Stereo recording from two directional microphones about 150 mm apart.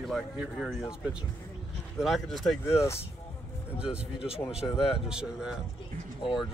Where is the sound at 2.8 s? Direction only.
15° left (ahead or behind).